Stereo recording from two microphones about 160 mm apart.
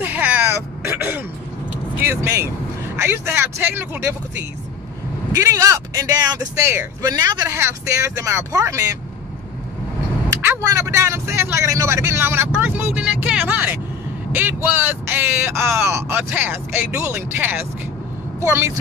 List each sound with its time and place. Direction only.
0.0 s a sound: 10° right (ahead or behind)
2.0 s speech: 15° right (ahead or behind)
5.3 s a man's voice: 20° right (ahead or behind)
10.4 s speech: 15° right (ahead or behind)